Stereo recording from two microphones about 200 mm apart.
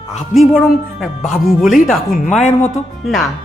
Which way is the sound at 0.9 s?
Centre (ahead or behind).